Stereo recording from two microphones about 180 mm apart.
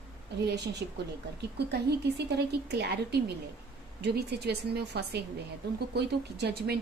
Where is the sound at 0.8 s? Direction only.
75° right (ahead or behind).